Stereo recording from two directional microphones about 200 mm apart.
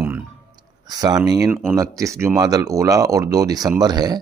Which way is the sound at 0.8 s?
20° right (ahead or behind).